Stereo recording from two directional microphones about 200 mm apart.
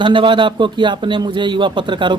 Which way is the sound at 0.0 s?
25° right (ahead or behind).